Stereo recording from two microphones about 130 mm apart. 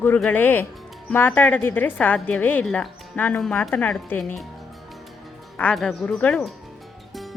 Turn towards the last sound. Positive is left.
turn(degrees=5)  # may be behind; listen again after turning